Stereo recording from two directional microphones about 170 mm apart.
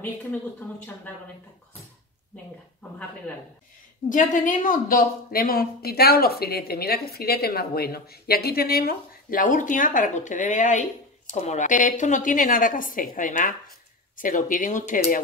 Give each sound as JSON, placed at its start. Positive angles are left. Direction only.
{"t": 4.1, "sound": "speech", "side_deg": 50}